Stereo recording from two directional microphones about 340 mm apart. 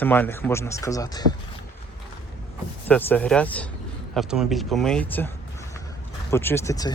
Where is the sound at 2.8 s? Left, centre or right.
Centre.